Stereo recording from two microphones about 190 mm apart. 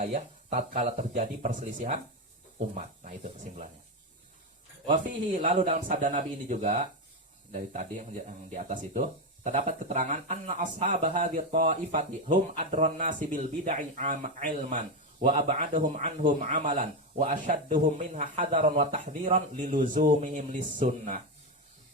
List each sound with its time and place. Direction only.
0.0 s speech: 40° right (ahead or behind)
5.4 s speech: 40° right (ahead or behind)